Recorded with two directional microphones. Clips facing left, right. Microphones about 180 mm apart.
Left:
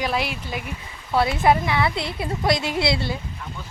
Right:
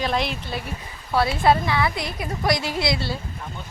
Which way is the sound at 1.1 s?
20° left (ahead or behind).